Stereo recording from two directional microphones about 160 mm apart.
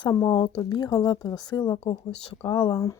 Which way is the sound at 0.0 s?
25° left (ahead or behind).